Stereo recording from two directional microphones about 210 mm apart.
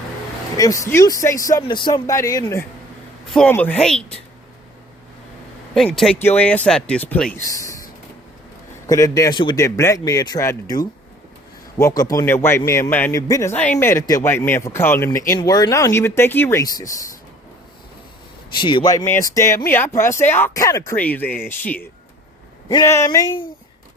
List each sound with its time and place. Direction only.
0.5 s a man's voice: 15° left (ahead or behind)
5.7 s a man's voice: centre (ahead or behind)
8.9 s a man's voice: 15° left (ahead or behind)
18.5 s a man's voice: 20° left (ahead or behind)